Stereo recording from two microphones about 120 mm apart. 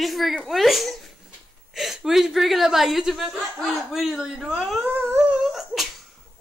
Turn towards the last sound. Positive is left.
turn(degrees=0)  # may be behind; listen again after turning